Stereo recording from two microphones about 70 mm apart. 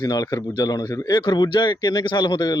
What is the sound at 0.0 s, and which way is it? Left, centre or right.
Speech, left.